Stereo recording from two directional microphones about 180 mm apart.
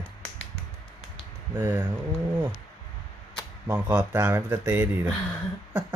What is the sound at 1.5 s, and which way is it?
Speech, 10° right (ahead or behind).